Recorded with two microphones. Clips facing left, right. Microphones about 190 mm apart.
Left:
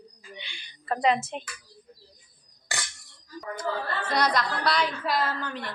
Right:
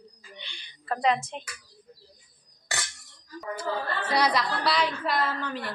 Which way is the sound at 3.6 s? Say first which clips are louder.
Even; 10° right (ahead or behind).